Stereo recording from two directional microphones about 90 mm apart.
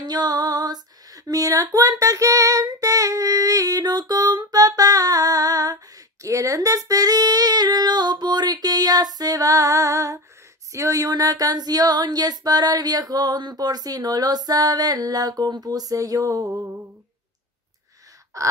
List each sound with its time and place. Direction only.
0.0 s female singing: 50° right (ahead or behind)
10.7 s child singing: 40° right (ahead or behind)
18.3 s gasp: 35° right (ahead or behind)